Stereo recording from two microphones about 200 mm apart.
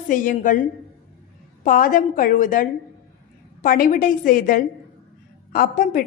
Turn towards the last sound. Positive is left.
turn(degrees=45)  # may be behind; listen again after turning